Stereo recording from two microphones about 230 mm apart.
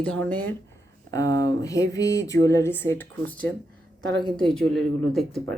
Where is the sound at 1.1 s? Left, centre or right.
Centre.